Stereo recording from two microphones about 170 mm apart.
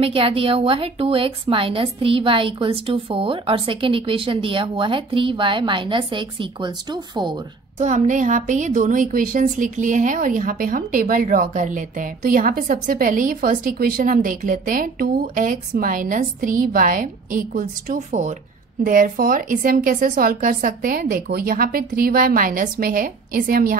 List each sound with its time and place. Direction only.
0.0 s a woman's voice: 35° right (ahead or behind)
7.8 s a woman's voice: 45° right (ahead or behind)